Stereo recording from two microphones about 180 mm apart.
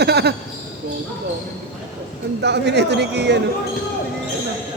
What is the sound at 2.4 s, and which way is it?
A woman's voice, 70° right (ahead or behind).